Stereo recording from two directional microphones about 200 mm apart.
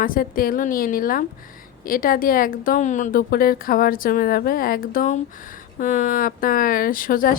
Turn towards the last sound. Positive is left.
turn(degrees=45)  # may be behind; listen again after turning